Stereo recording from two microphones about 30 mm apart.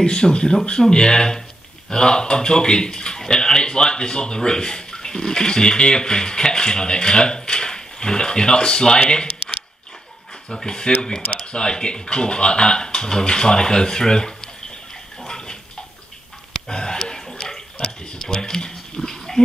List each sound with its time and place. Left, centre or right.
0.0 s speech: left
10.5 s speech: left
15.2 s bathtub: left
16.6 s speech: left
18.2 s speech: centre
19.0 s pig: centre